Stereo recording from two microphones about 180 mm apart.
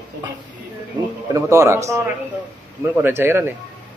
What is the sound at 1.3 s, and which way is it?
A man's voice, 15° right (ahead or behind).